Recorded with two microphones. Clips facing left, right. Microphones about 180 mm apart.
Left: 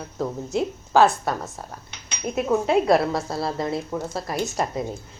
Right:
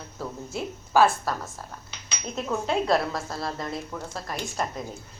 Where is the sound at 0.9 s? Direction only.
20° left (ahead or behind).